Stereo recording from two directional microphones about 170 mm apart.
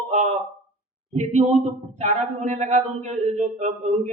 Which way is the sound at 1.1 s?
40° right (ahead or behind).